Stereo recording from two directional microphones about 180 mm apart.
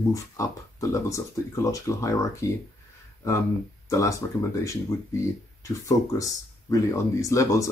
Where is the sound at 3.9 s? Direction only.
20° left (ahead or behind).